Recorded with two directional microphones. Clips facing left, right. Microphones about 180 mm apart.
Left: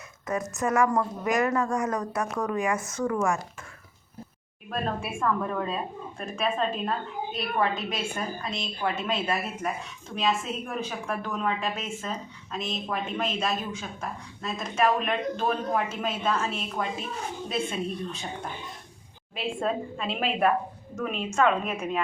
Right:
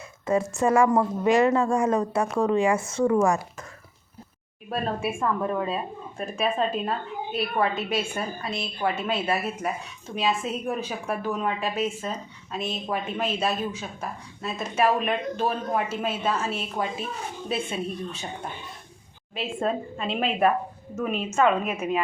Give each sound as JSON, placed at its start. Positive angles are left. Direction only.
{"t": 0.3, "sound": "a woman's voice", "side_deg": -30}
{"t": 4.7, "sound": "speech", "side_deg": -10}
{"t": 14.6, "sound": "speech", "side_deg": -10}
{"t": 19.4, "sound": "a woman's voice", "side_deg": 0}